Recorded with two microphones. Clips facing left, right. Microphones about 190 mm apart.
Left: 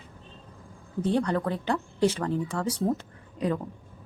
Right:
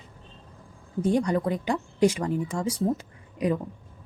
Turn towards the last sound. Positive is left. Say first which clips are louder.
# right 2 dB
turn(degrees=-10)  # may be behind; listen again after turning